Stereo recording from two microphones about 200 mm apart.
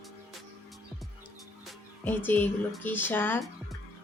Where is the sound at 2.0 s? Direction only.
10° left (ahead or behind).